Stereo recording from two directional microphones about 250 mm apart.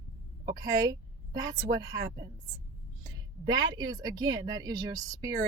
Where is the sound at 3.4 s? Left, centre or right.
Centre.